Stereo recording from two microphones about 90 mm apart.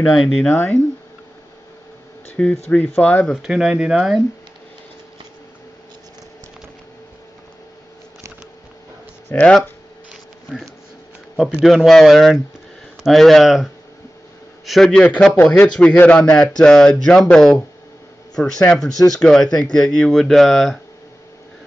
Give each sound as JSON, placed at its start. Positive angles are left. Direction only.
{"t": 0.1, "sound": "a man's voice", "side_deg": 0}
{"t": 2.3, "sound": "speech", "side_deg": 15}
{"t": 3.4, "sound": "speech", "side_deg": -10}
{"t": 9.3, "sound": "speech", "side_deg": 15}
{"t": 11.3, "sound": "a man's voice", "side_deg": -5}
{"t": 14.7, "sound": "speech", "side_deg": 5}
{"t": 18.6, "sound": "speech", "side_deg": 10}